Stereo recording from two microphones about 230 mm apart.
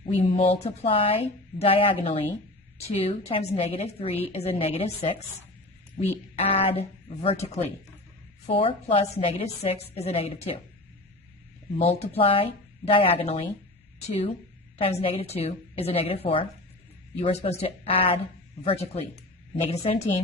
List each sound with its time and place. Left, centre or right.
0.0 s a woman's voice: left
11.8 s a woman's voice: left
15.0 s a woman's voice: left